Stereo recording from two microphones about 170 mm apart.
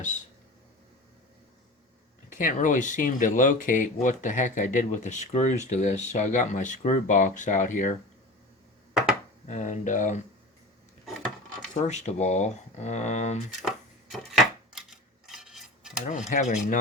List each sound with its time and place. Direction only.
2.3 s speech: 50° left (ahead or behind)
8.9 s chopping: 5° right (ahead or behind)
9.5 s speech: 45° left (ahead or behind)
11.7 s speech: 45° left (ahead or behind)
13.6 s a sound: centre (ahead or behind)
16.0 s speech: 45° left (ahead or behind)